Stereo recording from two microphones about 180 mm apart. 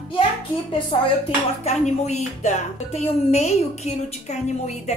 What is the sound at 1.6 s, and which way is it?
A woman's voice, 40° left (ahead or behind).